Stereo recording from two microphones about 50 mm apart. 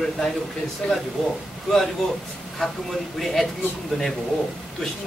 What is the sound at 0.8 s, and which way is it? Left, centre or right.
Speech, left.